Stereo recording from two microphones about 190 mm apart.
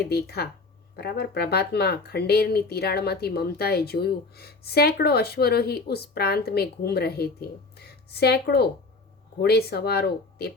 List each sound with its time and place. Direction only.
0.0 s speech: 55° left (ahead or behind)